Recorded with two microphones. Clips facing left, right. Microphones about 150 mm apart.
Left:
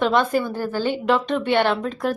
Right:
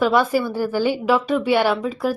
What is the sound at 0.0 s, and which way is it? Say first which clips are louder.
Speech: right 2 dB; 5° right (ahead or behind).